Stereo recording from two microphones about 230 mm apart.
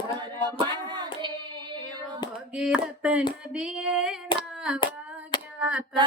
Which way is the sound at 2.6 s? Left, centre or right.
Centre.